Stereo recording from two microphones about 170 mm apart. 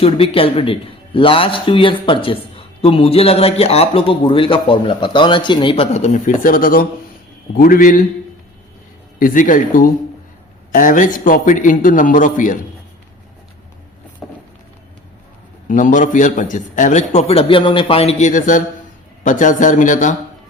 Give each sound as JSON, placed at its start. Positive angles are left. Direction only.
{"t": 0.0, "sound": "a man's voice", "side_deg": 35}
{"t": 9.1, "sound": "a man's voice", "side_deg": 55}
{"t": 14.2, "sound": "a sound", "side_deg": 0}
{"t": 15.6, "sound": "a man's voice", "side_deg": 50}